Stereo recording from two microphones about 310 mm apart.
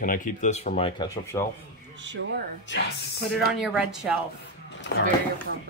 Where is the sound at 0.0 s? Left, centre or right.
Left.